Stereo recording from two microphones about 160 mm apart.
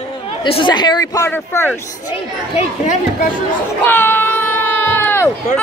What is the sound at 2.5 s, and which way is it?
Speech, 50° left (ahead or behind).